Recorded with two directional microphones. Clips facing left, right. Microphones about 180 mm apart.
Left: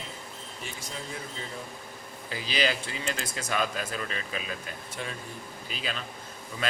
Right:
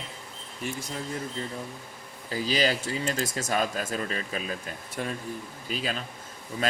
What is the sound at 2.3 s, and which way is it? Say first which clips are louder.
Speech: right 3 dB; 40° right (ahead or behind).